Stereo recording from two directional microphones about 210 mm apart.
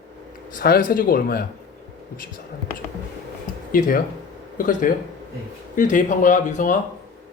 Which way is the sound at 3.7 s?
40° left (ahead or behind).